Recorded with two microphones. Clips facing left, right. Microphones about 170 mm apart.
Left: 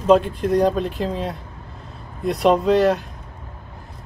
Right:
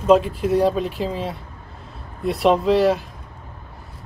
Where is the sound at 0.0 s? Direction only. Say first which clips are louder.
Even; 5° right (ahead or behind).